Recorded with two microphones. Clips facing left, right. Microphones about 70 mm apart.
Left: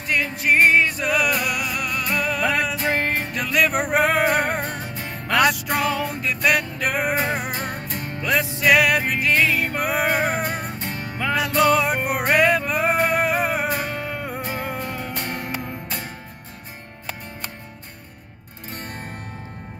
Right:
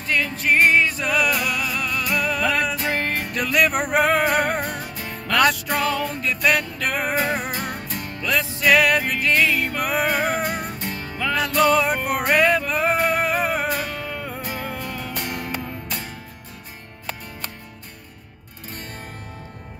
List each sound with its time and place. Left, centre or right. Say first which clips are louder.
0.1 s music: even; centre
2.0 s music: even; centre
2.8 s music: left 2 dB; left
3.3 s music: right 2 dB; centre
4.6 s music: even; left
5.3 s music: even; centre
8.2 s music: left 1 dB; left
8.6 s music: even; centre
11.3 s music: even; centre
12.3 s male singing: even; centre
13.7 s music: even; left
13.9 s music: left 2 dB; centre